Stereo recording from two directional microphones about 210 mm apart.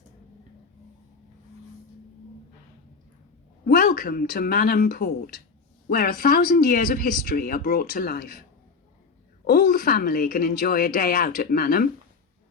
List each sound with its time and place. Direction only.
3.7 s speech: 45° left (ahead or behind)